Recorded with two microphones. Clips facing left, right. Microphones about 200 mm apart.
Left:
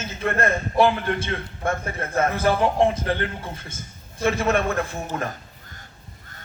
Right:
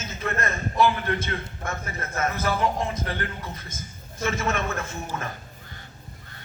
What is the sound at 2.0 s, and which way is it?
A man's voice, 30° left (ahead or behind).